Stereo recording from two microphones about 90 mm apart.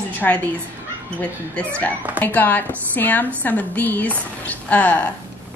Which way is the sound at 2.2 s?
20° left (ahead or behind).